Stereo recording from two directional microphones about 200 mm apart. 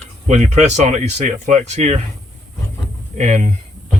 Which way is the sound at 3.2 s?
35° right (ahead or behind).